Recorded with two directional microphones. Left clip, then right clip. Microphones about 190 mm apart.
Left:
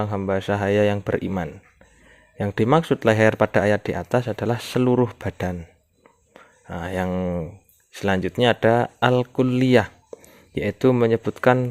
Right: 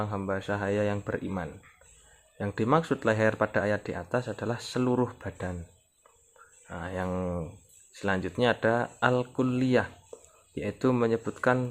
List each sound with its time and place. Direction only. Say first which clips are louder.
0.0 s speech: left 8 dB; 40° left (ahead or behind)
6.7 s speech: left 8 dB; 45° left (ahead or behind)
7.1 s speech: left 6 dB; 35° left (ahead or behind)